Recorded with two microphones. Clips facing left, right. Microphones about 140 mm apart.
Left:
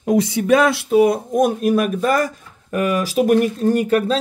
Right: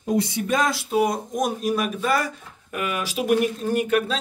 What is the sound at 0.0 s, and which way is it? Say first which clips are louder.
Speech: left 6 dB; 90° left.